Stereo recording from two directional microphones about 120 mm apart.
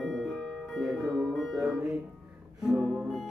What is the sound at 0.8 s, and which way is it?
Music, centre (ahead or behind).